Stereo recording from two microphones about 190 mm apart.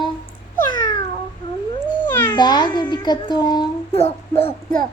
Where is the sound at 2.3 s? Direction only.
20° left (ahead or behind).